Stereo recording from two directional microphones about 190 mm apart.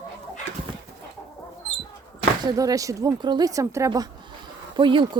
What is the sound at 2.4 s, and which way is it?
Speech, 20° right (ahead or behind).